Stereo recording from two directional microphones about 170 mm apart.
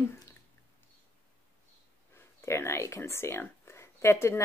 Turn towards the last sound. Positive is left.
turn(degrees=15)  # may be behind; listen again after turning